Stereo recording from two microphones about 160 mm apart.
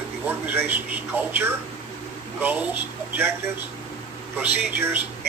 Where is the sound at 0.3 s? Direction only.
15° right (ahead or behind).